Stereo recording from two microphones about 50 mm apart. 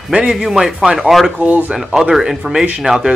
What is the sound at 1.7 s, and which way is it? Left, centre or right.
Speech, centre.